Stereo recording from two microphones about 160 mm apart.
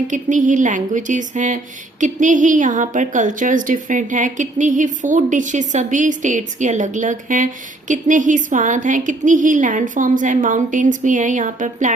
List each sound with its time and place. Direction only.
0.1 s a woman's voice: 50° right (ahead or behind)